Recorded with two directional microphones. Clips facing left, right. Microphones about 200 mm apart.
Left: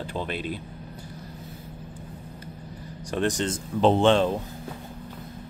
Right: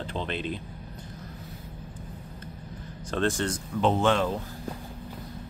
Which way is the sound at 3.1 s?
15° left (ahead or behind).